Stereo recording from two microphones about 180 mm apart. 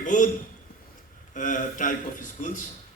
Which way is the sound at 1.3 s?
45° left (ahead or behind).